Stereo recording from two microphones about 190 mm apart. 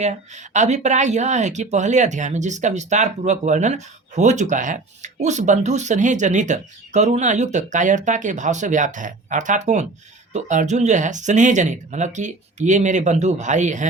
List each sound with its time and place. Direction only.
0.0 s speech: 40° right (ahead or behind)